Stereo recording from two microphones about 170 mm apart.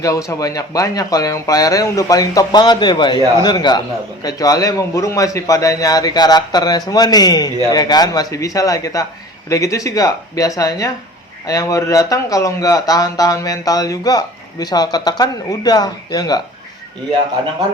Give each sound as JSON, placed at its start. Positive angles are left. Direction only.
{"t": 0.0, "sound": "speech", "side_deg": 20}